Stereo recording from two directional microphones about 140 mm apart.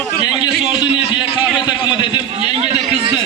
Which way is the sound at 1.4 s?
5° right (ahead or behind).